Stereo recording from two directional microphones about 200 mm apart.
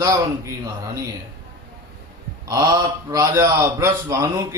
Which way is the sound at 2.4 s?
20° right (ahead or behind).